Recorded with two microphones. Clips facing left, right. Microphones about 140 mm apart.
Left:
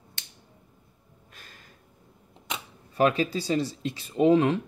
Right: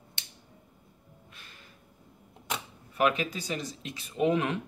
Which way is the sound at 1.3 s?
40° left (ahead or behind).